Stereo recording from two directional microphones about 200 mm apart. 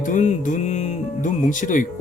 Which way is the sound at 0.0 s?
40° left (ahead or behind).